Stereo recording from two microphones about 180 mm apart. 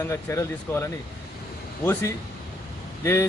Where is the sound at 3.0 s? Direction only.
15° left (ahead or behind).